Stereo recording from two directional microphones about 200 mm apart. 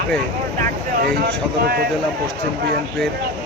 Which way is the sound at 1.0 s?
50° right (ahead or behind).